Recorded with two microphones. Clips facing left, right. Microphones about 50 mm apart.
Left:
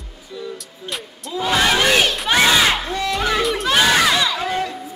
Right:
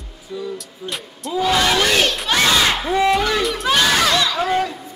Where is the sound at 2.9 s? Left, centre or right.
Centre.